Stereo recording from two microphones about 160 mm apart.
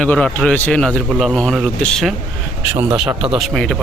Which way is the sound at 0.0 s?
5° left (ahead or behind).